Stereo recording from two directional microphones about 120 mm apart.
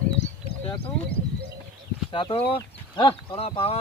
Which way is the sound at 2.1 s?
45° left (ahead or behind).